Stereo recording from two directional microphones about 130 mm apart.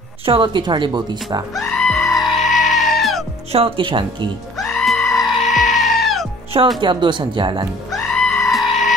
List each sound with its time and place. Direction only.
0.2 s speech: 40° right (ahead or behind)
1.5 s goat: centre (ahead or behind)
3.5 s speech: 45° right (ahead or behind)
4.6 s music: centre (ahead or behind)
6.8 s speech: 35° right (ahead or behind)
7.9 s music: 5° left (ahead or behind)